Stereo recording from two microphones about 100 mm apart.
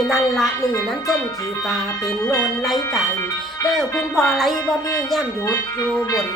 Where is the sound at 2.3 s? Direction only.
Centre (ahead or behind).